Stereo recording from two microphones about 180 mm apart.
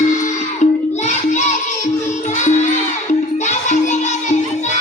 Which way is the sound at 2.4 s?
40° left (ahead or behind).